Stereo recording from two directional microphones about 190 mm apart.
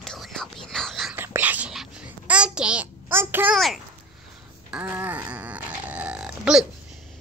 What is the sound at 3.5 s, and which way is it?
Speech, centre (ahead or behind).